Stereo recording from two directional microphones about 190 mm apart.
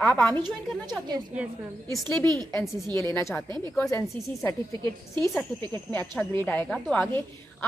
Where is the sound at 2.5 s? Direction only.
15° left (ahead or behind).